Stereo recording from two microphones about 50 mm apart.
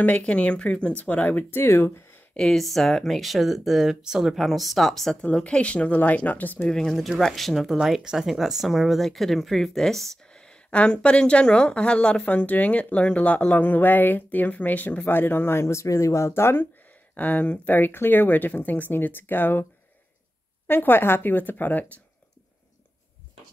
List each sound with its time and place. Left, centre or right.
0.0 s a woman's voice: left
1.5 s speech: left
2.3 s speech: centre
5.2 s speech: left
6.7 s speech: centre
7.0 s speech: centre
7.7 s a woman's voice: centre; by 15.6 s left
15.6 s speech: left
17.1 s speech: left
20.6 s speech: left